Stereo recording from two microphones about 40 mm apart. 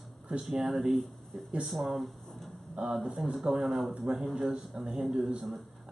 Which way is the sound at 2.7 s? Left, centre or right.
Centre.